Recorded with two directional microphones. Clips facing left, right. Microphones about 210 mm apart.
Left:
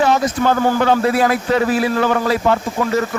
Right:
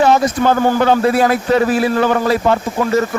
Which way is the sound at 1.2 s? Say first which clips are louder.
Right 2 dB; 35° right (ahead or behind).